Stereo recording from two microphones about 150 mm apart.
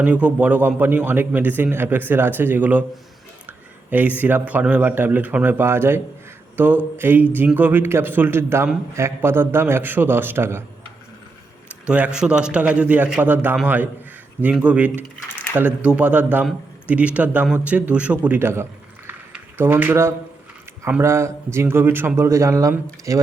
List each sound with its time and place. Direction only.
0.0 s speech: 10° right (ahead or behind)
3.4 s a sound: 10° right (ahead or behind)
4.2 s speech: 10° right (ahead or behind)
11.9 s a man's voice: 10° right (ahead or behind)